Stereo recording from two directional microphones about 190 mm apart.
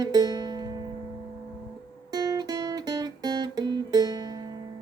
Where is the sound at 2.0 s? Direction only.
20° right (ahead or behind).